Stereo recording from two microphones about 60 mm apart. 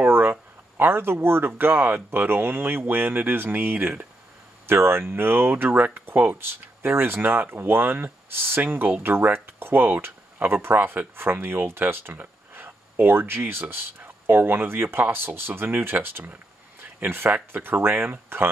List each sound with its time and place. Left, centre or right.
0.0 s speech: right